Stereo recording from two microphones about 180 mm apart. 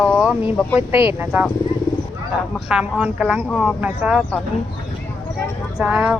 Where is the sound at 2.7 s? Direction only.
5° right (ahead or behind).